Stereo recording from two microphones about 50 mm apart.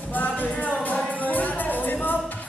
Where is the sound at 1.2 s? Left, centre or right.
Left.